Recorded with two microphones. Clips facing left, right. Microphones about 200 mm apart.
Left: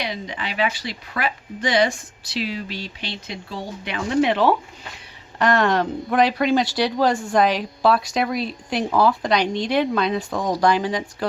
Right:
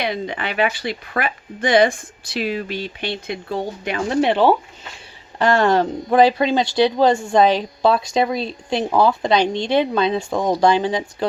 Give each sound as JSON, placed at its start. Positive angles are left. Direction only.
{"t": 0.0, "sound": "speech", "side_deg": -55}
{"t": 4.2, "sound": "speech", "side_deg": -30}